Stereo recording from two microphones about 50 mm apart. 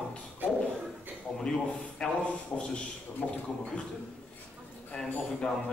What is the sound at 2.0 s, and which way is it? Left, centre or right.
Speech, centre.